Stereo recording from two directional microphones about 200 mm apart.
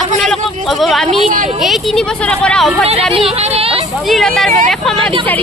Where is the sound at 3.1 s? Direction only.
30° right (ahead or behind).